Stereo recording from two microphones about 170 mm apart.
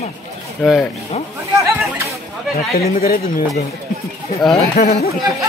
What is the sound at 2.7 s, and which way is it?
Speech, 60° left (ahead or behind).